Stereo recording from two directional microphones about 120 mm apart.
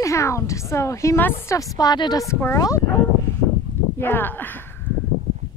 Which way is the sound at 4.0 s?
15° left (ahead or behind).